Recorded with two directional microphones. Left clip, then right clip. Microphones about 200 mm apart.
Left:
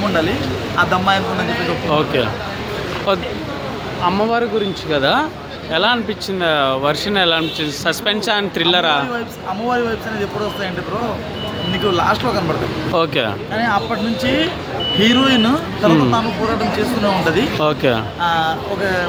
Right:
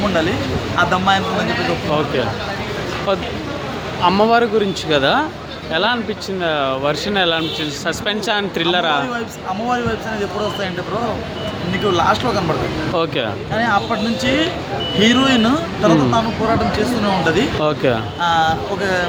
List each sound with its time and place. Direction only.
0.8 s speech: 5° left (ahead or behind)
4.0 s speech: 10° right (ahead or behind)
11.9 s speech: 5° left (ahead or behind)